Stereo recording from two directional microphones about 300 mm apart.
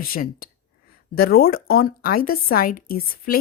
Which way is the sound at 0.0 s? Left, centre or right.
Left.